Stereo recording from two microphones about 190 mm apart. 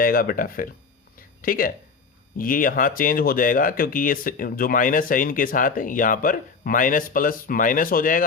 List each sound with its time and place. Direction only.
0.0 s speech: 50° left (ahead or behind)